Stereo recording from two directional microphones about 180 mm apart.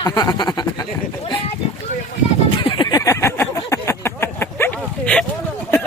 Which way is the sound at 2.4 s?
25° left (ahead or behind).